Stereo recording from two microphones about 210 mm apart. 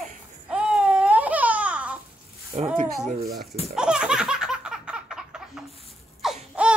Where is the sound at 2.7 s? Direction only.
40° right (ahead or behind).